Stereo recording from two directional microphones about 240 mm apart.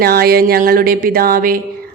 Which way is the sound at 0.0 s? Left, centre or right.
Right.